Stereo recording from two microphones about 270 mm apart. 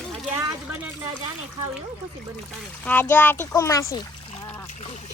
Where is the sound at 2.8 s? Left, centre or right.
Centre.